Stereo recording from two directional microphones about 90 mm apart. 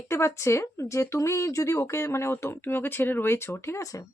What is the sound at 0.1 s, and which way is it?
Speech, 30° left (ahead or behind).